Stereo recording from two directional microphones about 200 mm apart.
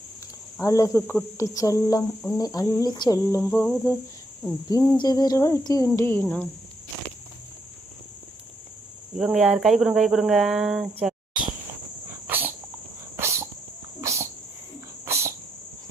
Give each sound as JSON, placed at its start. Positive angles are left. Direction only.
{"t": 0.6, "sound": "speech", "side_deg": 15}
{"t": 4.7, "sound": "a sound", "side_deg": 20}
{"t": 6.0, "sound": "speech", "side_deg": 10}
{"t": 9.1, "sound": "speech", "side_deg": 0}
{"t": 12.3, "sound": "dog", "side_deg": -10}
{"t": 15.0, "sound": "cricket", "side_deg": -15}